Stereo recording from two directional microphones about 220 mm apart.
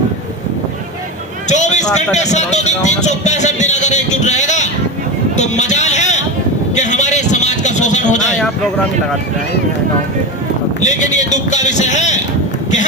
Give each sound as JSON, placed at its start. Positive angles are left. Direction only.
{"t": 1.5, "sound": "a sound", "side_deg": 30}
{"t": 1.9, "sound": "a man's voice", "side_deg": 30}
{"t": 5.4, "sound": "a sound", "side_deg": 30}
{"t": 6.7, "sound": "speech", "side_deg": 35}
{"t": 8.4, "sound": "speech", "side_deg": 0}
{"t": 10.8, "sound": "a man's voice", "side_deg": 35}